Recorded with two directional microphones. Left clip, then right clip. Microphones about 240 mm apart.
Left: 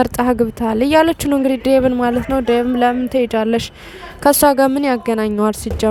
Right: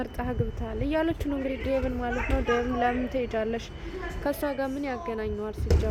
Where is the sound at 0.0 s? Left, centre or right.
Left.